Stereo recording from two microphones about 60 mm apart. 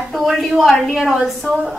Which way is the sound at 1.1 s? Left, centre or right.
Centre.